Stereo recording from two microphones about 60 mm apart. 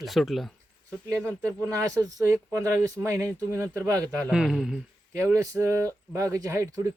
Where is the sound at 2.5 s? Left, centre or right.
Right.